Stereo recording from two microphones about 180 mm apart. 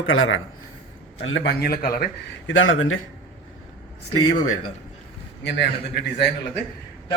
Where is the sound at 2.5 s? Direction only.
90° left.